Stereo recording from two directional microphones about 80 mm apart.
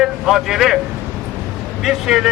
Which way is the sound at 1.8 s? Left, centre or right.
Centre.